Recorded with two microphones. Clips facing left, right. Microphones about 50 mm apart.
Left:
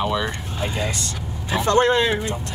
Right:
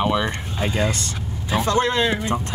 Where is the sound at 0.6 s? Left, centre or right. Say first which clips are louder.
Right 3 dB; right.